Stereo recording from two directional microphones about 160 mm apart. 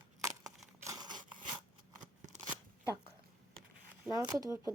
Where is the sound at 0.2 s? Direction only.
20° right (ahead or behind).